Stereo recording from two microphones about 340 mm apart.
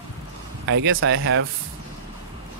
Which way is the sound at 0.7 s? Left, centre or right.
Right.